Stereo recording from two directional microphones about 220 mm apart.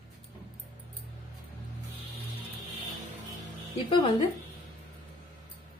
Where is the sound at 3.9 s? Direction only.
20° left (ahead or behind).